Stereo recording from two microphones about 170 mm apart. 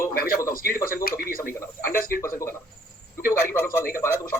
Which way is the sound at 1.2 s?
60° left (ahead or behind).